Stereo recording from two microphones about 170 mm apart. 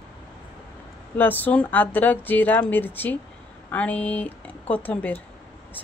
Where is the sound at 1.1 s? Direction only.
10° left (ahead or behind).